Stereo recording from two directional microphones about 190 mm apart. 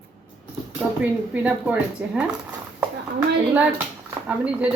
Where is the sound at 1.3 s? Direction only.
5° right (ahead or behind).